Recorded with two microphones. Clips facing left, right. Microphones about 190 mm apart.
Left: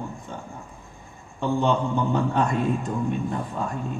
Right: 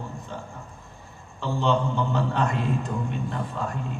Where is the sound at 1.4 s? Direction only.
50° left (ahead or behind).